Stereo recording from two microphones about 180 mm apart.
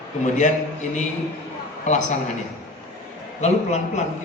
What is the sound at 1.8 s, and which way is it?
Speech, 40° left (ahead or behind).